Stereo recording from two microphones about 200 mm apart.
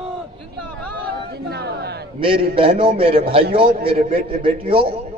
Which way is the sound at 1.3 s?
55° right (ahead or behind).